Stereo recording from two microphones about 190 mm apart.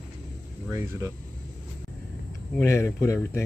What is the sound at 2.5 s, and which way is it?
Speech, 15° left (ahead or behind).